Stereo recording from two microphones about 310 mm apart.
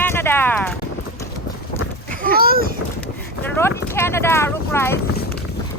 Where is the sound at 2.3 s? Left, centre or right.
Right.